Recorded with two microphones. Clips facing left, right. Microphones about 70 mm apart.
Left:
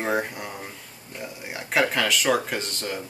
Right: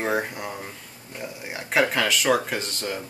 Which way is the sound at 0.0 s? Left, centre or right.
Centre.